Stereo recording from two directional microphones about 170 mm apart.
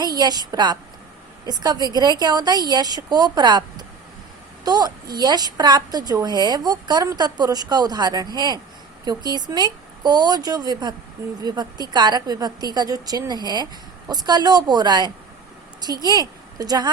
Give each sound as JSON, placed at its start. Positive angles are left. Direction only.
{"t": 0.0, "sound": "a woman's voice", "side_deg": -25}